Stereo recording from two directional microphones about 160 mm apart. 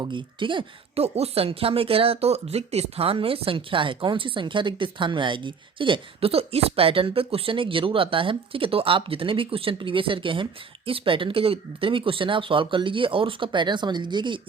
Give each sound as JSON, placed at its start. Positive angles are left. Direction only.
{"t": 0.0, "sound": "speech", "side_deg": -30}